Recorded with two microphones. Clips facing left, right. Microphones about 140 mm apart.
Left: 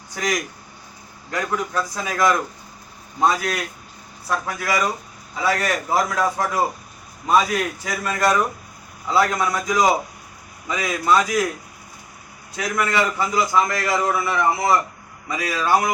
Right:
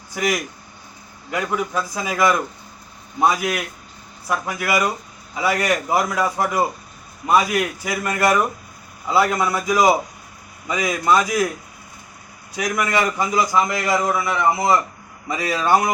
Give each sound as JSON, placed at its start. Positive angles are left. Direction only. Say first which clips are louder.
{"t": 0.1, "sound": "a man's voice", "louder": "right 2 dB", "side_deg": -10}
{"t": 12.5, "sound": "a man's voice", "louder": "right 1 dB", "side_deg": -10}